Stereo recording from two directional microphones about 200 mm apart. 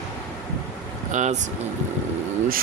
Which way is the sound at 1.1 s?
40° right (ahead or behind).